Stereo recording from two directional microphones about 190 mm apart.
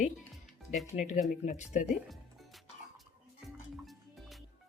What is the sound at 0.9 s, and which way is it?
Speech, 40° left (ahead or behind).